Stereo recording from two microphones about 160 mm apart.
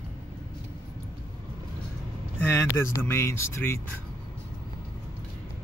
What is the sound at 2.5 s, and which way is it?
Speech, 15° left (ahead or behind).